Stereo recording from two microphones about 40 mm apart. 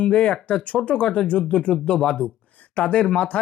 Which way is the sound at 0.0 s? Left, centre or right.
Left.